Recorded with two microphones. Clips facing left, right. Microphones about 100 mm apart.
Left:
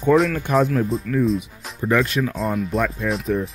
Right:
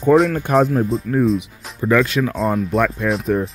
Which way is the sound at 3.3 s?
55° right (ahead or behind).